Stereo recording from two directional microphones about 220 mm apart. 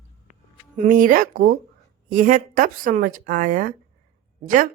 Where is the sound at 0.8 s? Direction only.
35° right (ahead or behind).